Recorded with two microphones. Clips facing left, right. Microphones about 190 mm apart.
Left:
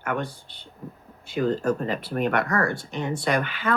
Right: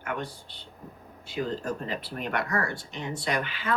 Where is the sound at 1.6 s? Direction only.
55° left (ahead or behind).